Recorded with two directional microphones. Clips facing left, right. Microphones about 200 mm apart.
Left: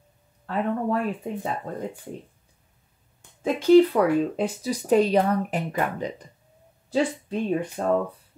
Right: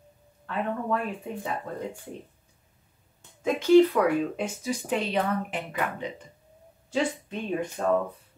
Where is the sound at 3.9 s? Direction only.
35° left (ahead or behind).